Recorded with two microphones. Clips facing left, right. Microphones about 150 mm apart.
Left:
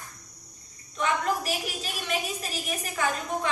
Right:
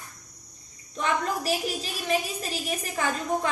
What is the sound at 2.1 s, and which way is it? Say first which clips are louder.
Speech: right 5 dB; 35° right (ahead or behind).